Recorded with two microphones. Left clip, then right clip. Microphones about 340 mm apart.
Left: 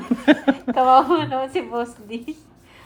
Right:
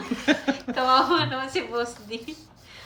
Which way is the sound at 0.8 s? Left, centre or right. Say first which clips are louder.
Left 5 dB; centre.